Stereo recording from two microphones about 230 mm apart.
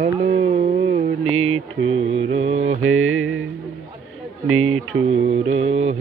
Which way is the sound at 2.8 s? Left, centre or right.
Right.